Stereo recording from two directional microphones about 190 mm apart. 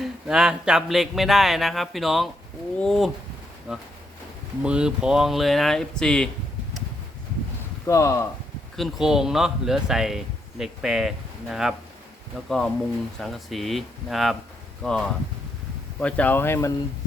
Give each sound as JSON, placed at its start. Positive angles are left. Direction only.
{"t": 0.0, "sound": "speech", "side_deg": -5}
{"t": 7.9, "sound": "speech", "side_deg": 15}
{"t": 8.7, "sound": "speech", "side_deg": 0}